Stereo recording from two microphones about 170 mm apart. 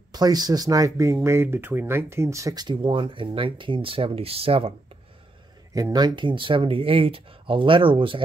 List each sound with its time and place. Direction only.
0.1 s speech: 25° right (ahead or behind)
5.8 s speech: 20° right (ahead or behind)